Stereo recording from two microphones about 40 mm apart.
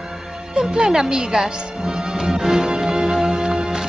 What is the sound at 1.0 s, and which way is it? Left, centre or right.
Music, centre.